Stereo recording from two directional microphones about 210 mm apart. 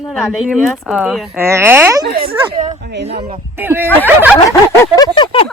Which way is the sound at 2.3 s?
25° right (ahead or behind).